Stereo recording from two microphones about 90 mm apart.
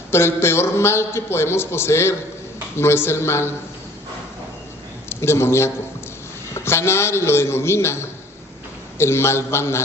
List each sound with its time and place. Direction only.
0.1 s a man's voice: 30° left (ahead or behind)
5.0 s a man's voice: 30° left (ahead or behind)